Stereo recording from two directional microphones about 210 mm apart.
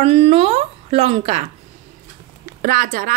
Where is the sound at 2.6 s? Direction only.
45° right (ahead or behind).